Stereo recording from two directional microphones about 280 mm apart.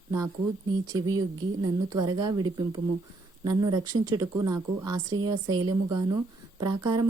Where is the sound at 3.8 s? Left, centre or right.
Right.